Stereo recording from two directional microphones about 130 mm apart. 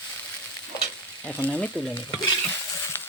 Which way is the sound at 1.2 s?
10° left (ahead or behind).